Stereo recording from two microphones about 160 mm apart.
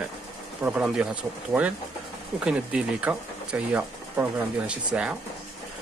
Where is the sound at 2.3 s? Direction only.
5° right (ahead or behind).